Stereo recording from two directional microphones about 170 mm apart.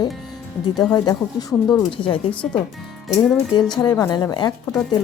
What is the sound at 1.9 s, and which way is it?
Speech, 30° left (ahead or behind).